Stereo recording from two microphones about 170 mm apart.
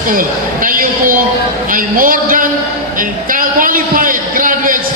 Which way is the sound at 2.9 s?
55° right (ahead or behind).